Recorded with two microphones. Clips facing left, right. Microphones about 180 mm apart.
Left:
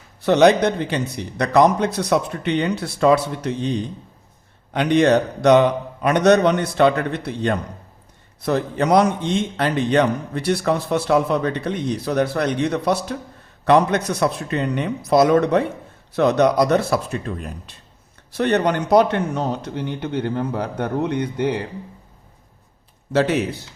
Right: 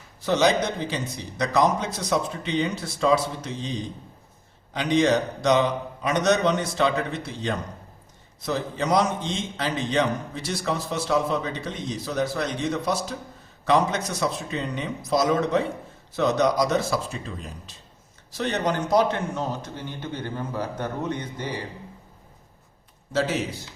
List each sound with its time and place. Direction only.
0.2 s a man's voice: 65° left (ahead or behind)
23.1 s a man's voice: 65° left (ahead or behind)